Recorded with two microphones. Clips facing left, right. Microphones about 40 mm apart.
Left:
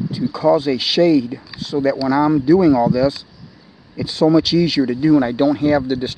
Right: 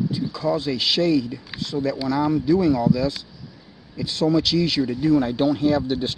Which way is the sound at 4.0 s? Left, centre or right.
Left.